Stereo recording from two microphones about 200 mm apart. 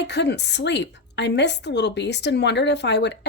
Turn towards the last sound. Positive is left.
turn(degrees=60)  # may be behind; listen again after turning